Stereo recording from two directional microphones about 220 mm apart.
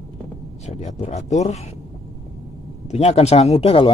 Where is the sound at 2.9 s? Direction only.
30° left (ahead or behind).